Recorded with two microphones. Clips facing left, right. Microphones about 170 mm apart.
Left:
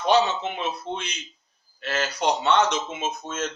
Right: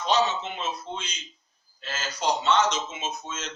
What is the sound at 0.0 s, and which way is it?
A man's voice, 60° left (ahead or behind).